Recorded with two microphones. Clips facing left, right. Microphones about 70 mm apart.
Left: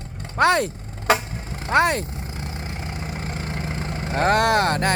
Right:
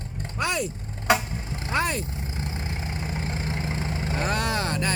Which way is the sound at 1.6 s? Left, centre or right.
Left.